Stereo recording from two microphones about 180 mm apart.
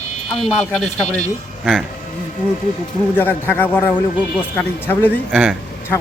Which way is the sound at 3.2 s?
10° left (ahead or behind).